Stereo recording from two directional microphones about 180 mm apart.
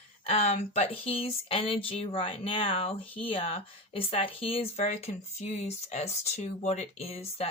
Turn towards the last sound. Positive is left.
turn(degrees=35)  # may be behind; listen again after turning